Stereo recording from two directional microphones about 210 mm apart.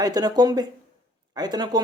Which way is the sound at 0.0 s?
20° right (ahead or behind).